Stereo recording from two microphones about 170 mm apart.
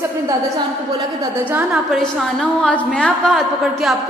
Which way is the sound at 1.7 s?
Centre (ahead or behind).